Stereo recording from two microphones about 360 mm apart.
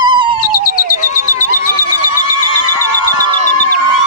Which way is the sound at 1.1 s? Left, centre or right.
Left.